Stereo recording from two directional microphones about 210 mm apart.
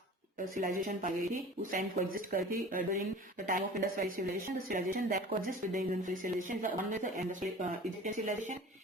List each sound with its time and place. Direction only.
0.5 s a woman's voice: 40° right (ahead or behind)